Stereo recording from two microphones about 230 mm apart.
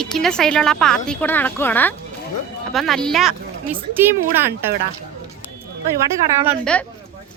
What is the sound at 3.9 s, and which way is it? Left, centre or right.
Speech, centre.